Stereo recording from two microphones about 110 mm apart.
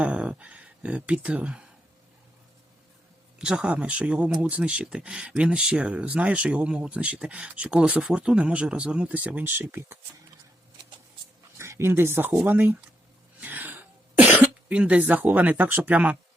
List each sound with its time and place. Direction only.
0.0 s speech: 10° right (ahead or behind)
3.3 s speech: 5° right (ahead or behind)
11.5 s speech: 25° right (ahead or behind)
12.5 s speech: 15° right (ahead or behind)
13.4 s cough: 15° right (ahead or behind)